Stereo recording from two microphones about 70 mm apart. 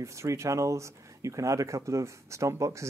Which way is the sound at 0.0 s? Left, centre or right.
Right.